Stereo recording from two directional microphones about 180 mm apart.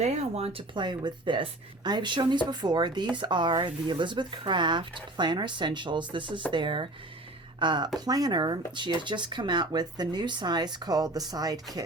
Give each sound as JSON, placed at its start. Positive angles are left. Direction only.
{"t": 0.0, "sound": "speech", "side_deg": -35}